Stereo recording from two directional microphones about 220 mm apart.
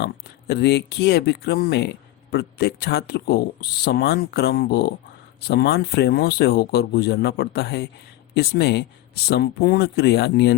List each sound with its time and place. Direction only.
0.0 s speech: 50° left (ahead or behind)